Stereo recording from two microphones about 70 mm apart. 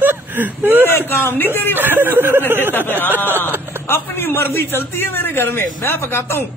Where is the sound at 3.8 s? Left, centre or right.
Left.